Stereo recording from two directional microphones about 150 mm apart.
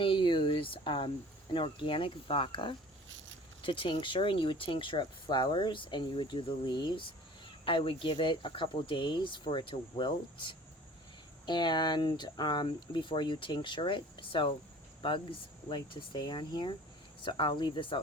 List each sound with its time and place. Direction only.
0.0 s speech: 35° left (ahead or behind)
15.7 s speech: 30° left (ahead or behind)